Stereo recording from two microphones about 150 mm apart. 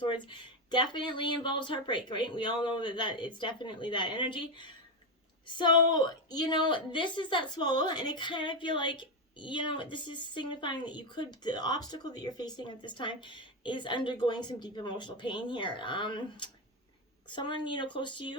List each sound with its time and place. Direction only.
0.0 s a woman's voice: 30° left (ahead or behind)